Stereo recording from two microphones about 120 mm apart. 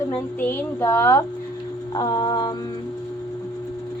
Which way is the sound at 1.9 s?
35° left (ahead or behind).